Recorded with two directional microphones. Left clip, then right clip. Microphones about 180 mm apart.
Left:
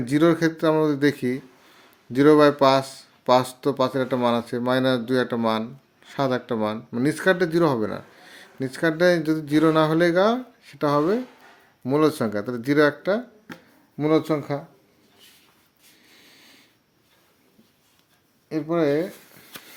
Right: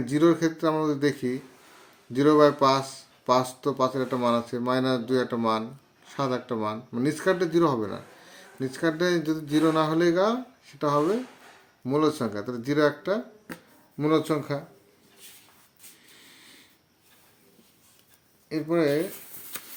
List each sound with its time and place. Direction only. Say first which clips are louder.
0.0 s speech: left 3 dB; 45° left (ahead or behind)
14.0 s speech: left 3 dB; 25° left (ahead or behind)
18.4 s speech: left 2 dB; 30° left (ahead or behind)